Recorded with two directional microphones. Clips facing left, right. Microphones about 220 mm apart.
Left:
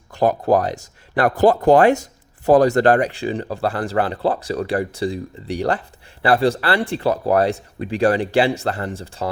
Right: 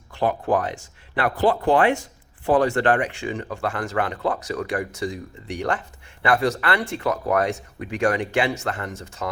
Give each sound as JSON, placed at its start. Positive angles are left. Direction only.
{"t": 0.1, "sound": "speech", "side_deg": 40}